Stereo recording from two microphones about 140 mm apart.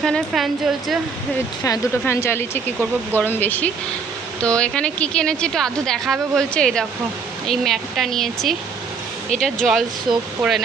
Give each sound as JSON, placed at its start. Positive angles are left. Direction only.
{"t": 0.0, "sound": "a woman's voice", "side_deg": 0}
{"t": 1.6, "sound": "a woman's voice", "side_deg": 20}